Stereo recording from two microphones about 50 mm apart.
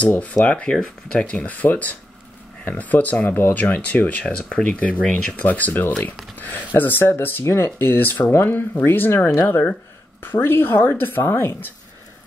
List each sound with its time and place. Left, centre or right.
0.0 s speech: left
0.6 s speech: centre; by 3.6 s left
3.6 s speech: left
7.9 s speech: left